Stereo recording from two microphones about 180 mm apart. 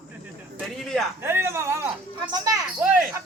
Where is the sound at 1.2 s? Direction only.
15° right (ahead or behind).